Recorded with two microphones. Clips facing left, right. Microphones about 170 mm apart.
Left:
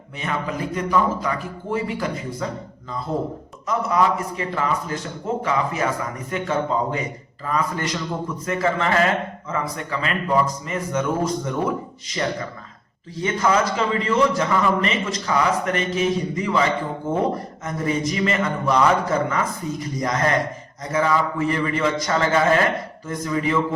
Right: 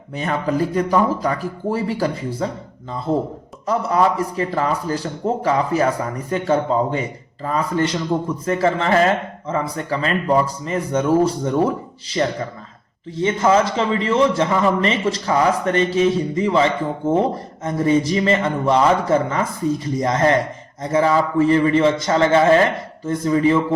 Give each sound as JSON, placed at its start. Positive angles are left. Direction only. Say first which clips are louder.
{"t": 0.2, "sound": "a man's voice", "louder": "right 6 dB", "side_deg": -35}
{"t": 13.1, "sound": "a man's voice", "louder": "right 4 dB", "side_deg": -25}